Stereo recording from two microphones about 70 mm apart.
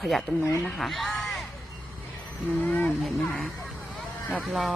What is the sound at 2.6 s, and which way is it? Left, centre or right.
Speech, left.